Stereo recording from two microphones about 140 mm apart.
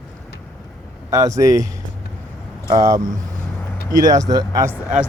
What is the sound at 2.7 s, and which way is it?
Speech, 25° right (ahead or behind).